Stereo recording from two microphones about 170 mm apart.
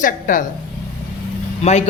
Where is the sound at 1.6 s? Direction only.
40° left (ahead or behind).